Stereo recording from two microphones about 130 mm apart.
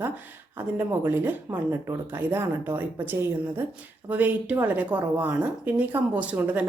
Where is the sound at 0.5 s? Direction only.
15° right (ahead or behind).